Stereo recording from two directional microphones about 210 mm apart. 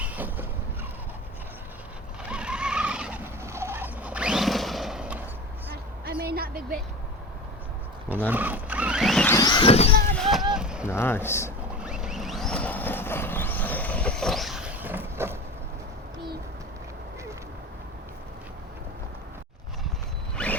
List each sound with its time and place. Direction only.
0.0 s a sound: 10° right (ahead or behind)
2.3 s vehicle: 5° right (ahead or behind)
5.7 s a sound: 45° right (ahead or behind)
8.3 s a sound: 10° right (ahead or behind); by 9.9 s 30° left (ahead or behind)
10.2 s vehicle: centre (ahead or behind)
10.5 s rowboat: 5° right (ahead or behind)
10.8 s speech: 10° left (ahead or behind)
11.8 s vehicle: 5° right (ahead or behind)
20.3 s zipper: 5° left (ahead or behind)